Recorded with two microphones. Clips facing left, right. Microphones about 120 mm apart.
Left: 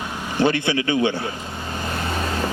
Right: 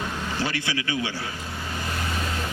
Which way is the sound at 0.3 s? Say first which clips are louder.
Left 12 dB; 20° left (ahead or behind).